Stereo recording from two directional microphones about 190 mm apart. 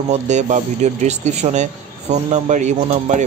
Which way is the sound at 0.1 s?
40° right (ahead or behind).